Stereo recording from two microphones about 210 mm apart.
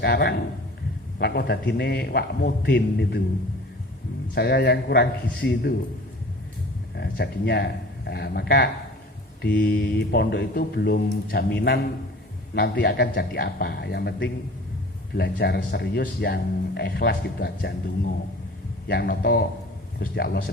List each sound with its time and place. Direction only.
0.0 s speech: 50° left (ahead or behind)
4.4 s speech: 50° left (ahead or behind)
6.9 s speech: 50° left (ahead or behind)